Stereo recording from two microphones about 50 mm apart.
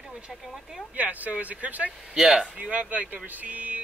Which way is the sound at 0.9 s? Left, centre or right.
Right.